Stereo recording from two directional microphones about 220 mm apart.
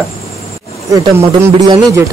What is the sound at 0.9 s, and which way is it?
Speech, 20° right (ahead or behind).